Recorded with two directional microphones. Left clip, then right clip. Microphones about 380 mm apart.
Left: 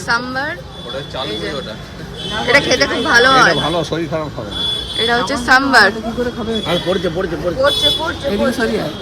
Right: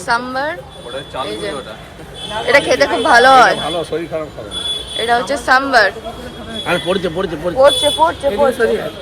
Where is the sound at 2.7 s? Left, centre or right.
Centre.